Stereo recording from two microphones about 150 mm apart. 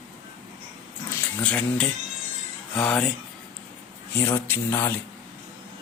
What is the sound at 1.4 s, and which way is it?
Speech, 10° left (ahead or behind).